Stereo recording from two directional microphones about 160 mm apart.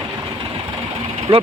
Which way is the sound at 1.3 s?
35° right (ahead or behind).